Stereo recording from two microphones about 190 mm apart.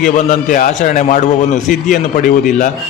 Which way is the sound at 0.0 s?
40° left (ahead or behind).